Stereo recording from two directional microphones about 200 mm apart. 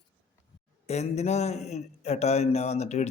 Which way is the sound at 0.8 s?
35° left (ahead or behind).